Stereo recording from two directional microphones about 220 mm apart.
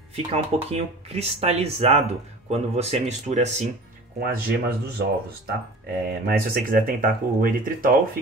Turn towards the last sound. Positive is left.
turn(degrees=-40)  # may be behind; listen again after turning